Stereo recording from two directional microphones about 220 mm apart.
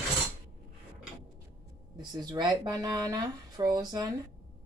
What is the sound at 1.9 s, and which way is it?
Speech, 20° right (ahead or behind).